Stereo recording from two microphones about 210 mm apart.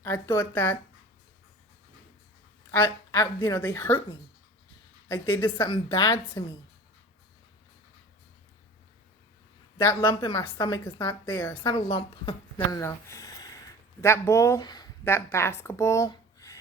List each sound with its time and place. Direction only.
0.0 s speech: 10° left (ahead or behind)
2.8 s a woman's voice: 20° left (ahead or behind)
3.8 s speech: 10° left (ahead or behind)
5.0 s a woman's voice: 20° left (ahead or behind)
10.0 s a woman's voice: 20° left (ahead or behind)
12.5 s a sound: 15° left (ahead or behind)
14.0 s speech: 10° left (ahead or behind)